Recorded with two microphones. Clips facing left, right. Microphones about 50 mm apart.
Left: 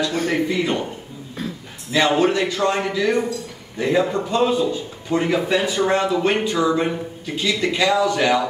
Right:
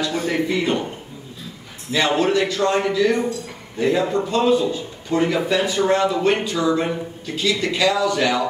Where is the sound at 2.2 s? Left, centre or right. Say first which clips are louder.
Even; left.